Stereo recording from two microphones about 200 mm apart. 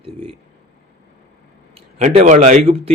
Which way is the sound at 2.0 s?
35° right (ahead or behind).